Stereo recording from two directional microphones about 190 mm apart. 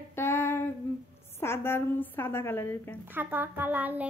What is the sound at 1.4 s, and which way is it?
A woman's voice, 10° left (ahead or behind).